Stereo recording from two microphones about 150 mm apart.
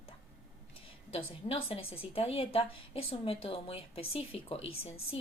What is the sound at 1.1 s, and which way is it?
A woman's voice, 40° left (ahead or behind).